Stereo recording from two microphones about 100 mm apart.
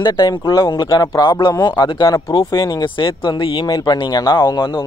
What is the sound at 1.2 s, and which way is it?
Speech, 50° left (ahead or behind).